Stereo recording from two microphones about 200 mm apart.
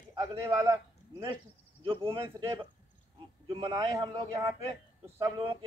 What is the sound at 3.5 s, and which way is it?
A man's voice, 25° right (ahead or behind).